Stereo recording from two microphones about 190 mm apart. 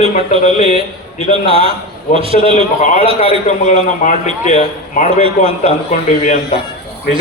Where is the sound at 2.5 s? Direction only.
40° left (ahead or behind).